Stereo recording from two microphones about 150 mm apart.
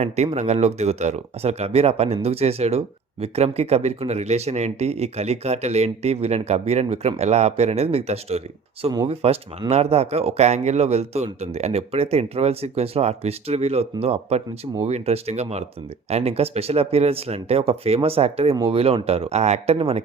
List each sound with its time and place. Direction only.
0.0 s speech: 45° right (ahead or behind)